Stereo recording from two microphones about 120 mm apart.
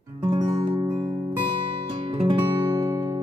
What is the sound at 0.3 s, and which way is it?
Music, 35° right (ahead or behind).